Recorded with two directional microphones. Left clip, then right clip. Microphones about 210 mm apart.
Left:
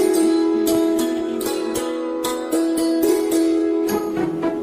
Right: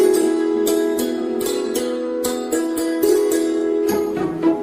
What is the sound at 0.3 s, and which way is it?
Music, 15° left (ahead or behind).